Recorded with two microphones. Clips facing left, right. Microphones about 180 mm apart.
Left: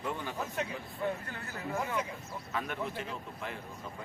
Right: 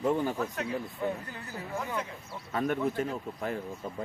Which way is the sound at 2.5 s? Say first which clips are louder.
Right 8 dB; 45° right (ahead or behind).